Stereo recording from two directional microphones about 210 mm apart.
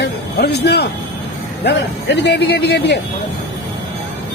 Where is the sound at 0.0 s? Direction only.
50° left (ahead or behind).